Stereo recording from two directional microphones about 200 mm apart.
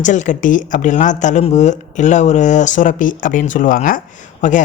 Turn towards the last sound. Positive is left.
turn(degrees=40)  # may be behind; listen again after turning